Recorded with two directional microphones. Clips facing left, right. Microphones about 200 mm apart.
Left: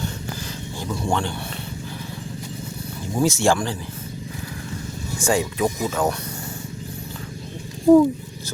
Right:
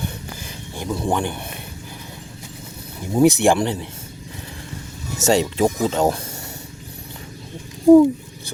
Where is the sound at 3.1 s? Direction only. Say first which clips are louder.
Right 5 dB; 20° right (ahead or behind).